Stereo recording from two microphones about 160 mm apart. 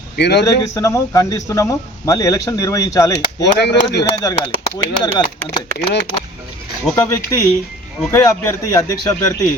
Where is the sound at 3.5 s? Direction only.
90° left.